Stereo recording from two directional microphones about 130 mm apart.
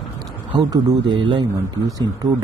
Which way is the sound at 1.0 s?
40° right (ahead or behind).